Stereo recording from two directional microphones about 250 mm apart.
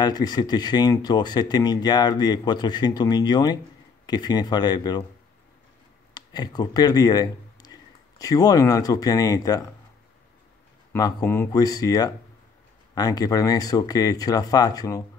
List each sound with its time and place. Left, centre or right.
0.0 s speech: centre
6.1 s speech: centre
10.9 s speech: centre